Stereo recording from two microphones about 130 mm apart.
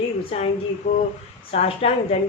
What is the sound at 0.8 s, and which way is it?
A woman's voice, 60° left (ahead or behind).